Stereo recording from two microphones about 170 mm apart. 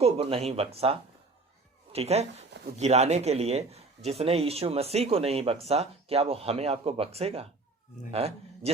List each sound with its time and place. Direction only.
0.0 s speech: 35° right (ahead or behind)